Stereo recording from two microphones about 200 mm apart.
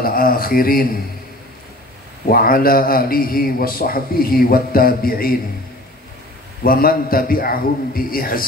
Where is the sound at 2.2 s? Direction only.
45° left (ahead or behind).